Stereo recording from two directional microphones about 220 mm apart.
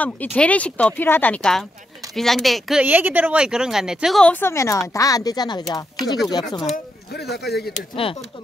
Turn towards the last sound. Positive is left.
turn(degrees=50)  # may be behind; listen again after turning